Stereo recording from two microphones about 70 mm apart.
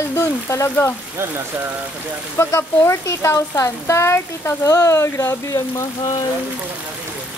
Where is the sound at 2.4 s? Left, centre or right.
Left.